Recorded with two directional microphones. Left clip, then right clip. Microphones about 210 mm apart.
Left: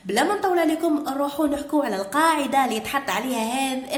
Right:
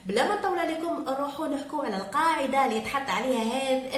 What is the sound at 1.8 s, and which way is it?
Speech, 50° left (ahead or behind).